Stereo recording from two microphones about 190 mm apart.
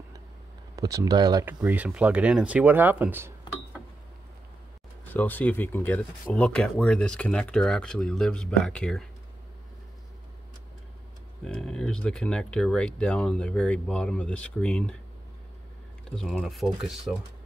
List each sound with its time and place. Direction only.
0.7 s speech: 15° right (ahead or behind)
1.4 s speech: 10° right (ahead or behind)
5.1 s speech: 10° left (ahead or behind)
11.4 s speech: 5° left (ahead or behind)
16.2 s speech: centre (ahead or behind)